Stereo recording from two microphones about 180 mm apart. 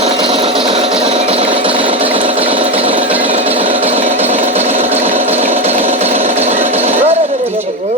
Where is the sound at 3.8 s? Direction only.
35° right (ahead or behind).